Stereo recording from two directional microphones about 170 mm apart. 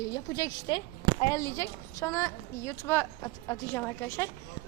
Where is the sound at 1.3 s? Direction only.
15° left (ahead or behind).